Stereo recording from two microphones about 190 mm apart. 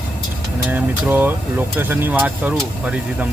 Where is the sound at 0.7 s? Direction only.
10° right (ahead or behind).